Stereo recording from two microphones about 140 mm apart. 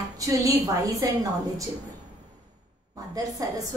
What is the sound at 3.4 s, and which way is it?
Speech, 25° right (ahead or behind).